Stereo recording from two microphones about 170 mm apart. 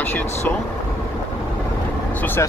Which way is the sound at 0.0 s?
10° left (ahead or behind).